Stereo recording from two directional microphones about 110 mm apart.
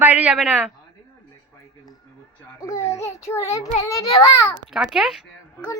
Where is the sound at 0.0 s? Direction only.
15° right (ahead or behind).